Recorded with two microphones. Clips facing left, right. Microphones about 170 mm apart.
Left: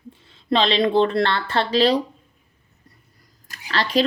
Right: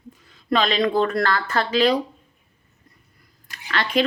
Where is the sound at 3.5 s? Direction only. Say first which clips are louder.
Left 1 dB; 35° left (ahead or behind).